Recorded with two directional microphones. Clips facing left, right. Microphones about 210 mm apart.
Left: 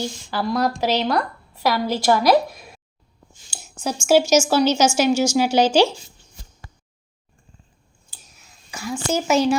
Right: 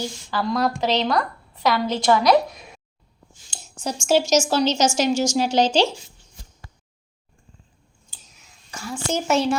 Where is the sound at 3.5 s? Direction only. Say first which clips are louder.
Left 2 dB; 5° left (ahead or behind).